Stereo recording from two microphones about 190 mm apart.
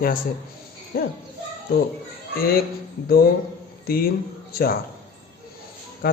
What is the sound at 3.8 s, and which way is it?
Speech, 50° left (ahead or behind).